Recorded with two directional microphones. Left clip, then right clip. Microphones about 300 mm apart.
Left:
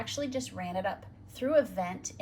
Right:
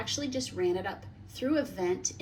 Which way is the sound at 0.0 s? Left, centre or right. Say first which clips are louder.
Right 1 dB; centre.